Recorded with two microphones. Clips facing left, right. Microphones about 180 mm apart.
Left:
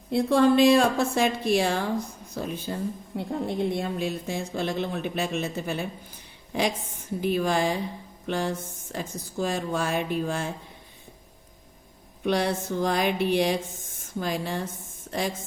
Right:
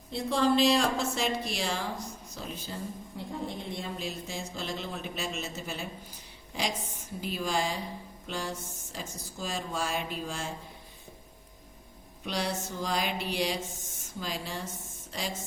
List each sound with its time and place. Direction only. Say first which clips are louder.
0.1 s speech: left 7 dB; 60° left (ahead or behind)
12.2 s speech: left 8 dB; 55° left (ahead or behind)